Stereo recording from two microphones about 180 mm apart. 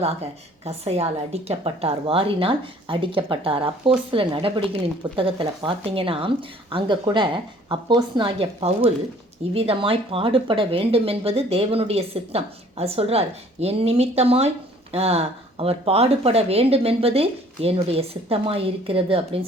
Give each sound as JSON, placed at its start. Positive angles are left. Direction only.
{"t": 0.0, "sound": "a woman's voice", "side_deg": -35}